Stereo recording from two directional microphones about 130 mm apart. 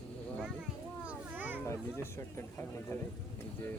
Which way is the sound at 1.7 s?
20° left (ahead or behind).